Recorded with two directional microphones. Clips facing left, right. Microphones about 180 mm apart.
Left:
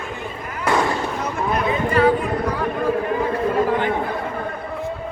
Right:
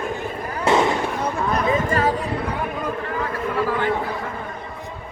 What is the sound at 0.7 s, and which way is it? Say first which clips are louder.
Fireworks: right 2 dB; 25° right (ahead or behind).